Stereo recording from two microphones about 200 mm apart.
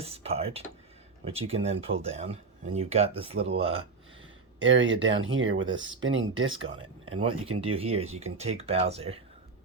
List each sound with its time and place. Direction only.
0.0 s speech: 30° right (ahead or behind)
4.2 s speech: 70° right (ahead or behind)
6.7 s speech: 90° right
7.6 s speech: 30° right (ahead or behind)